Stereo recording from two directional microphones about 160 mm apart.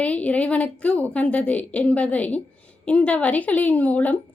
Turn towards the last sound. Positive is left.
turn(degrees=10)  # may be behind; listen again after turning